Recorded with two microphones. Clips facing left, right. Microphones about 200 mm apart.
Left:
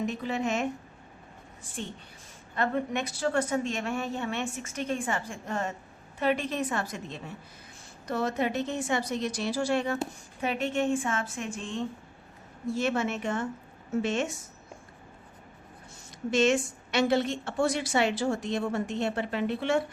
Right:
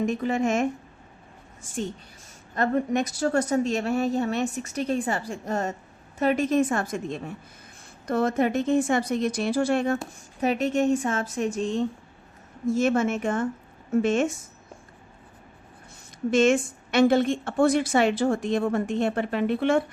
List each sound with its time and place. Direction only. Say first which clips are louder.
0.0 s a woman's voice: right 6 dB; 50° right (ahead or behind)
2.6 s a woman's voice: right 5 dB; 40° right (ahead or behind)
16.3 s a woman's voice: right 4 dB; 50° right (ahead or behind)